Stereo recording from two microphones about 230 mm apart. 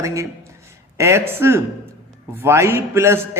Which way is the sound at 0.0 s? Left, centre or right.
Centre.